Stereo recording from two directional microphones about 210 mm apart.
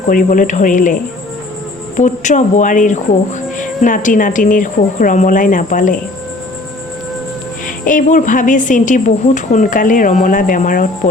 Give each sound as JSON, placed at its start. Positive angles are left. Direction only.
{"t": 0.1, "sound": "a woman's voice", "side_deg": 40}
{"t": 2.0, "sound": "a woman's voice", "side_deg": 35}
{"t": 7.9, "sound": "a woman's voice", "side_deg": 40}